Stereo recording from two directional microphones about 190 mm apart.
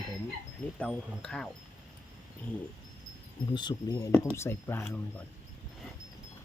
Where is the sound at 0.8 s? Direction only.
5° left (ahead or behind).